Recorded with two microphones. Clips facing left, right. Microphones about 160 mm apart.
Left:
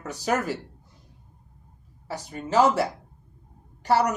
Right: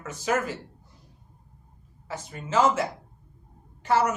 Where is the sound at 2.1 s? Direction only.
35° left (ahead or behind).